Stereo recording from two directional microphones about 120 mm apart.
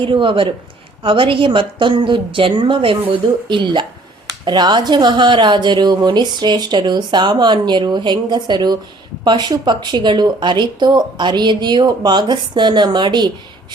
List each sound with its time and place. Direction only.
0.0 s a woman's voice: 45° right (ahead or behind)